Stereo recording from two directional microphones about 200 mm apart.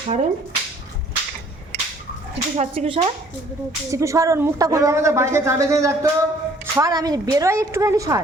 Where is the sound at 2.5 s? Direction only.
30° right (ahead or behind).